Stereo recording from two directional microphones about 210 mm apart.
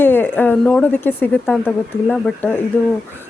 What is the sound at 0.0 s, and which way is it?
Speech, 10° left (ahead or behind).